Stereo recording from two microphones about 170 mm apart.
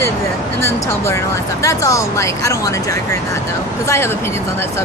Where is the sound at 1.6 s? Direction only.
20° left (ahead or behind).